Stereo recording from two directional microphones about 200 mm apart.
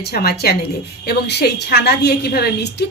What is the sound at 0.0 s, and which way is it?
A woman's voice, 50° left (ahead or behind).